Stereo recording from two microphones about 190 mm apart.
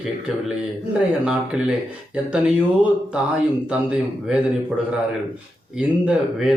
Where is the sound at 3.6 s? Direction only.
5° right (ahead or behind).